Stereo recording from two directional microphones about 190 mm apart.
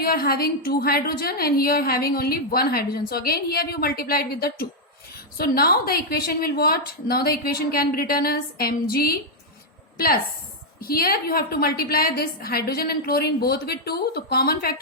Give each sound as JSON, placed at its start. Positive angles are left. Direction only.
{"t": 0.0, "sound": "a woman's voice", "side_deg": 50}
{"t": 10.8, "sound": "a woman's voice", "side_deg": 50}